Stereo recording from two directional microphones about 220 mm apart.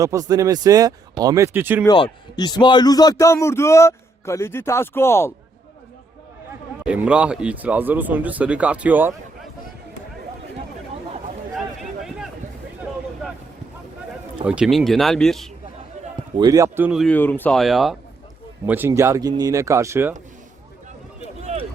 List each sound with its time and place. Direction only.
0.0 s a man's voice: 15° right (ahead or behind)
2.3 s a man's voice: 20° left (ahead or behind)
6.8 s a man's voice: 5° right (ahead or behind)
11.5 s a sound: centre (ahead or behind)
14.4 s speech: 5° right (ahead or behind)
16.4 s a man's voice: 15° right (ahead or behind)
21.5 s run: 30° right (ahead or behind)